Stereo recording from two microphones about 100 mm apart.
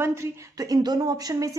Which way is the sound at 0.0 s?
30° right (ahead or behind).